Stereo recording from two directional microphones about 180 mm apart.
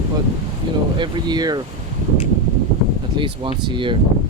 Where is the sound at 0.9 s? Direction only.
25° right (ahead or behind).